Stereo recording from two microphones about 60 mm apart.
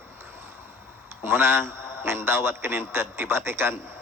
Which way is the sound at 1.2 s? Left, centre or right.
Right.